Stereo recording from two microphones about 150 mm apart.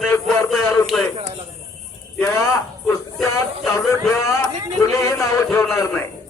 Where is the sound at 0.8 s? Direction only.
Centre (ahead or behind).